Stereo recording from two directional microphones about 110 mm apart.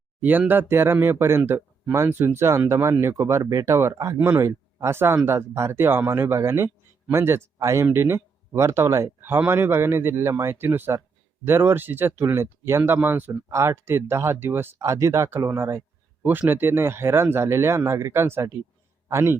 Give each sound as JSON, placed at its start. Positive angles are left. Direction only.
{"t": 0.2, "sound": "a man's voice", "side_deg": -15}